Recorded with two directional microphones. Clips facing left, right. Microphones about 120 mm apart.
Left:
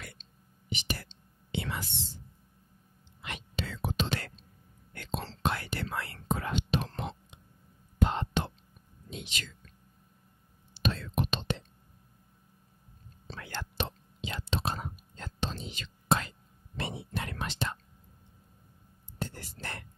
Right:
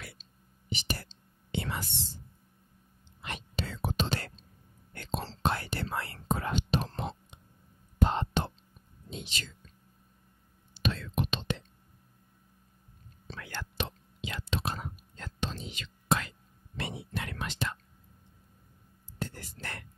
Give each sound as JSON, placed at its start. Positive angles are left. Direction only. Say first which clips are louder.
{"t": 0.0, "sound": "whispering", "louder": "even", "side_deg": -5}
{"t": 0.7, "sound": "whispering", "louder": "even", "side_deg": -35}
{"t": 3.2, "sound": "whispering", "louder": "right 1 dB", "side_deg": -35}
{"t": 10.7, "sound": "whispering", "louder": "left 1 dB", "side_deg": 35}
{"t": 13.3, "sound": "whispering", "louder": "left 1 dB", "side_deg": 30}
{"t": 19.1, "sound": "whispering", "louder": "even", "side_deg": 30}